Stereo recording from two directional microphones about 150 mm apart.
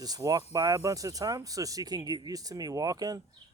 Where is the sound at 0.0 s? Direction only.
25° right (ahead or behind).